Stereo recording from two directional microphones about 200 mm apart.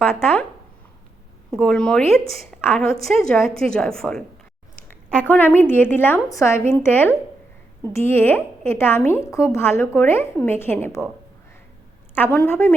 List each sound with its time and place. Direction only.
1.5 s a woman's voice: centre (ahead or behind)
12.1 s a woman's voice: 10° left (ahead or behind)